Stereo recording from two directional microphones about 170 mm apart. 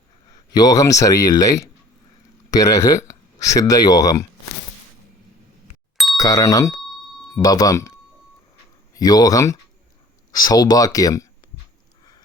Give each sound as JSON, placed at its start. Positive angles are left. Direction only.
{"t": 0.5, "sound": "speech", "side_deg": 20}
{"t": 6.1, "sound": "speech", "side_deg": 20}
{"t": 9.0, "sound": "speech", "side_deg": 20}